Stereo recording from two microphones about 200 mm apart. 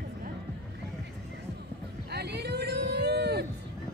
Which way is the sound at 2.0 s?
55° right (ahead or behind).